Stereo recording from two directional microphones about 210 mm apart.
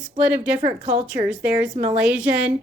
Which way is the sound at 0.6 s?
35° right (ahead or behind).